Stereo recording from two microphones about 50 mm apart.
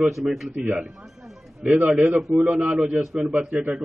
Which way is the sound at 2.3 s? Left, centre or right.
Centre.